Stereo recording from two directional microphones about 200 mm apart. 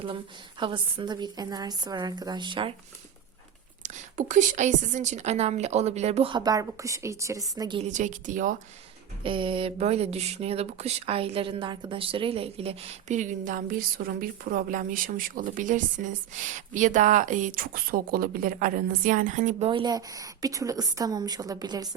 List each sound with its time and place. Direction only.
0.6 s a woman's voice: 25° right (ahead or behind)
3.8 s a woman's voice: 40° right (ahead or behind); by 7.8 s 20° right (ahead or behind)
7.8 s speech: 35° right (ahead or behind)
9.2 s speech: 25° right (ahead or behind)